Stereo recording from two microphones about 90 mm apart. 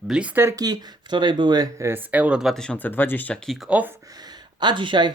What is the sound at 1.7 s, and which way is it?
Speech, 30° right (ahead or behind).